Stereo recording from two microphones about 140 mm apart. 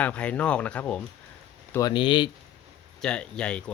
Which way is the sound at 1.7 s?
30° left (ahead or behind).